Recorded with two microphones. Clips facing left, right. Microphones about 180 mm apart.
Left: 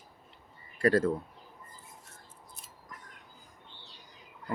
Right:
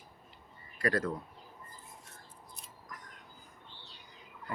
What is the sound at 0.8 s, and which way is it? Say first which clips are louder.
Speech: left 6 dB; 30° left (ahead or behind).